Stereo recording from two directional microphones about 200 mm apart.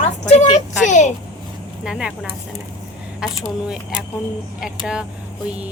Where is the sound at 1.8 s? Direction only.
5° right (ahead or behind).